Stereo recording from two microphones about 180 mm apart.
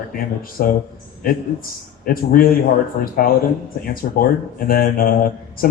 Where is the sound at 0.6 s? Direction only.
60° left (ahead or behind).